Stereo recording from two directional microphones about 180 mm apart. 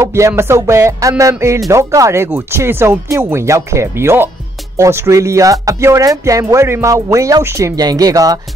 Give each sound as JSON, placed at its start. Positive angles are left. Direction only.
{"t": 0.0, "sound": "speech", "side_deg": -15}